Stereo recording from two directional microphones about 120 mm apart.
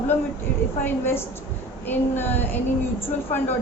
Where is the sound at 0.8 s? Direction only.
20° left (ahead or behind).